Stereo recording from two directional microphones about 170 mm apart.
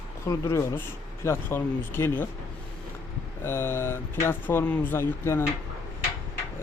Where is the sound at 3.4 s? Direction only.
15° left (ahead or behind).